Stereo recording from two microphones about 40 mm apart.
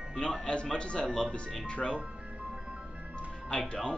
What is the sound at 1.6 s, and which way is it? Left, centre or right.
Speech, left.